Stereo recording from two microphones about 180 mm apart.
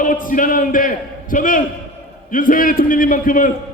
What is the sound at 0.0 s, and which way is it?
A man's voice, 50° left (ahead or behind).